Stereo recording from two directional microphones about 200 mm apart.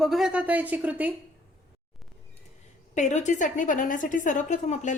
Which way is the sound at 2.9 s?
35° left (ahead or behind).